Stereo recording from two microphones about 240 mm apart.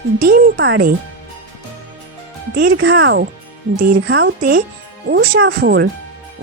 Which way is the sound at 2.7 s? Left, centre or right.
Right.